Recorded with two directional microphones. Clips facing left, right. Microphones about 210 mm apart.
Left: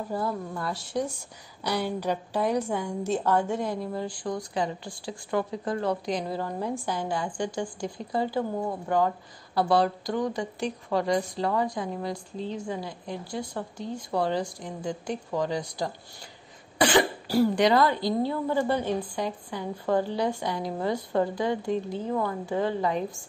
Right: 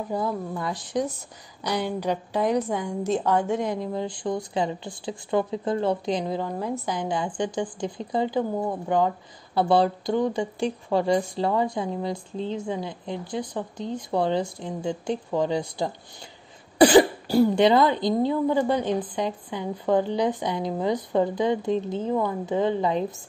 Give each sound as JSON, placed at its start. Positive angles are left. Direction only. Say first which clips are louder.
{"t": 0.1, "sound": "a woman's voice", "louder": "right 3 dB", "side_deg": -15}
{"t": 16.7, "sound": "cough", "louder": "right 8 dB", "side_deg": -35}
{"t": 17.3, "sound": "a woman's voice", "louder": "right 1 dB", "side_deg": -25}